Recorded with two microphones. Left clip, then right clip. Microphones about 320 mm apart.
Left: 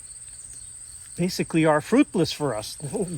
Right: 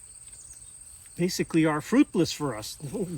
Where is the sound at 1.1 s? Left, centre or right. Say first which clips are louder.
Left 1 dB; centre.